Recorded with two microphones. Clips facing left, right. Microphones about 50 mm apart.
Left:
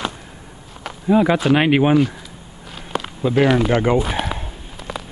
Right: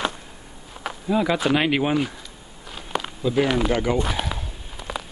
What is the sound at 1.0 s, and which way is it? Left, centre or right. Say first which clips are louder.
Speech: left 6 dB; centre.